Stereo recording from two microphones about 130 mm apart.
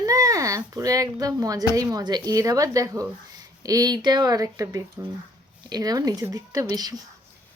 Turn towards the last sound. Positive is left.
turn(degrees=-30)  # may be behind; listen again after turning